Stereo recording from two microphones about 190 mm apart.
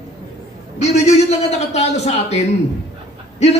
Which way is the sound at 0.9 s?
35° left (ahead or behind).